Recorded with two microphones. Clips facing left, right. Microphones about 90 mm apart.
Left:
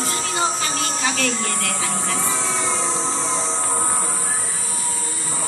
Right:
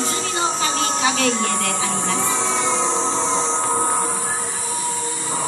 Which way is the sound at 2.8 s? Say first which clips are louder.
Right 4 dB; 30° right (ahead or behind).